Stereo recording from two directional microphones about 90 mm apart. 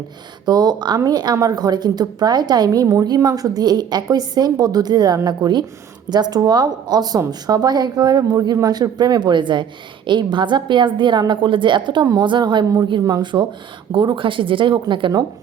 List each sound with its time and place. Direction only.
0.4 s a woman's voice: 50° right (ahead or behind); by 15.1 s 65° right (ahead or behind)